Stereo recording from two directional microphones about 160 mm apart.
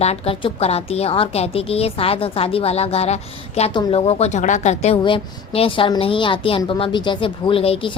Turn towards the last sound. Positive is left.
turn(degrees=35)  # may be behind; listen again after turning